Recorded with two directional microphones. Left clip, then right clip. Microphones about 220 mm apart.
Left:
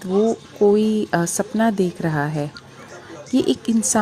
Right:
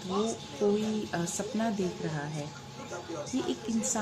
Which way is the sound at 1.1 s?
40° left (ahead or behind).